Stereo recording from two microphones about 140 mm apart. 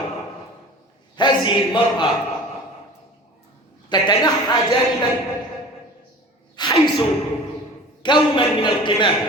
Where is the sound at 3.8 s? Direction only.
30° left (ahead or behind).